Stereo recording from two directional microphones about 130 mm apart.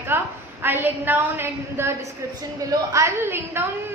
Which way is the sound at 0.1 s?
15° right (ahead or behind).